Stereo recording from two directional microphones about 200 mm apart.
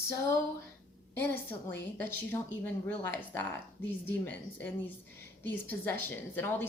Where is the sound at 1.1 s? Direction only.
10° left (ahead or behind).